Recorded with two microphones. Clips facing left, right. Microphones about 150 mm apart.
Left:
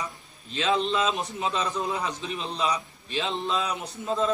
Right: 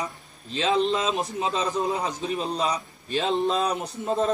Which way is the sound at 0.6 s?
35° right (ahead or behind).